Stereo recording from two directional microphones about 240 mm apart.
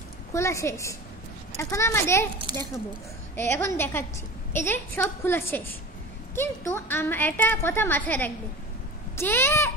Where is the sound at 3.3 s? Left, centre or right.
Centre.